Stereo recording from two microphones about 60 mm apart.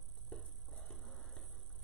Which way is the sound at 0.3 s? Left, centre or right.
Centre.